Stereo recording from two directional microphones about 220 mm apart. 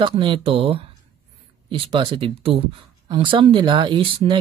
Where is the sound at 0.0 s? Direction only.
20° right (ahead or behind).